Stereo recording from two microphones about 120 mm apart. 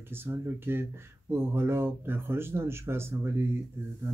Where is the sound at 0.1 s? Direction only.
20° right (ahead or behind).